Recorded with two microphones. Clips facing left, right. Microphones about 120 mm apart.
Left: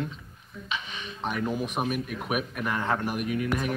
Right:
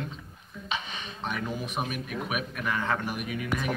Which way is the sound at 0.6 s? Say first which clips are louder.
Right 1 dB; 30° right (ahead or behind).